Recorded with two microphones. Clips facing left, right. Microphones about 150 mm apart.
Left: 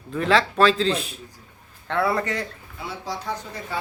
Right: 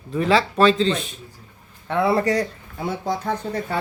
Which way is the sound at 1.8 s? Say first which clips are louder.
Right 2 dB; 15° right (ahead or behind).